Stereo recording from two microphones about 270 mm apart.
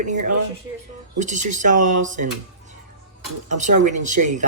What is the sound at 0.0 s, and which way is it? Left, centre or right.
Speech, right.